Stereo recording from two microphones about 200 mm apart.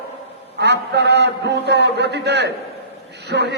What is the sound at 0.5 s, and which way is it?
A man's voice, 55° right (ahead or behind).